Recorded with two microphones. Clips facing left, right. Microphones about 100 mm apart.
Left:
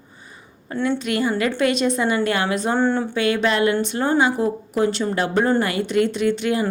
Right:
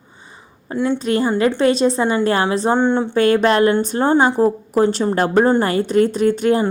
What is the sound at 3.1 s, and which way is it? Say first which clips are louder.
Speech: right 6 dB; 45° right (ahead or behind).